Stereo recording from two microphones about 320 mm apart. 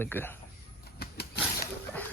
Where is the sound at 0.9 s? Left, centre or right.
Left.